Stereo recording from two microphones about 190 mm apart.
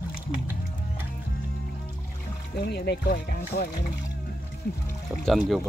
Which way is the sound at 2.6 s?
60° left (ahead or behind).